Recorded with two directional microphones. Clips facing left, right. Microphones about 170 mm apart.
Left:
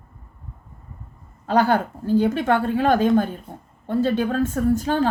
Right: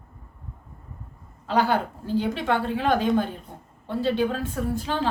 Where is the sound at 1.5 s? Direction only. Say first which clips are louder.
Left 4 dB; 50° left (ahead or behind).